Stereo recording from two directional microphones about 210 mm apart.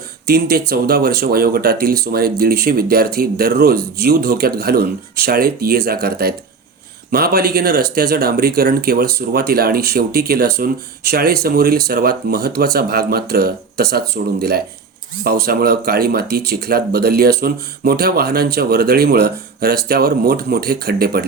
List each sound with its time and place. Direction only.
0.3 s speech: 50° right (ahead or behind)